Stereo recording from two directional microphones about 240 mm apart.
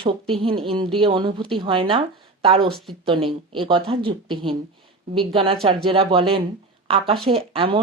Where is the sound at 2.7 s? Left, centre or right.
Centre.